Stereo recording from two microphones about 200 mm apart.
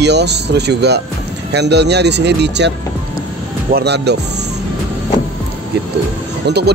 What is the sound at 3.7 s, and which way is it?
Speech, 55° right (ahead or behind).